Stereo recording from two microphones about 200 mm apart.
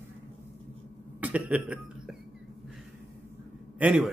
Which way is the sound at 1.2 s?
5° right (ahead or behind).